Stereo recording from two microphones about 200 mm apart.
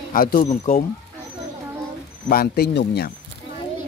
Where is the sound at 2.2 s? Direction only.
50° left (ahead or behind).